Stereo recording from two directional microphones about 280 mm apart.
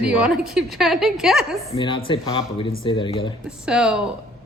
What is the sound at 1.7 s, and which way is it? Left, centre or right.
Speech, centre.